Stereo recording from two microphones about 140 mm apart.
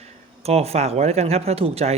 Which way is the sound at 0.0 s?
50° right (ahead or behind).